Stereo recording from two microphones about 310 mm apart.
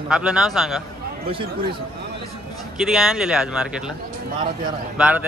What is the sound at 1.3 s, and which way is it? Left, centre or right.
Speech, centre.